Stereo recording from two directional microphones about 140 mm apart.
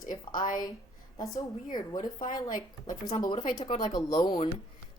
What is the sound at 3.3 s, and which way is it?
Speech, 65° left (ahead or behind).